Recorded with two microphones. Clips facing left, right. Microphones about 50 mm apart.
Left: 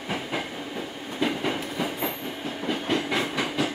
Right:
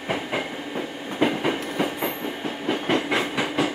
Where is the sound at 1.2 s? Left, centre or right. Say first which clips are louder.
Right 4 dB; right.